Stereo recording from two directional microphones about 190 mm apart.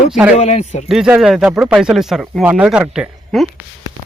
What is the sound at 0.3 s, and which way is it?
Speech, 35° left (ahead or behind).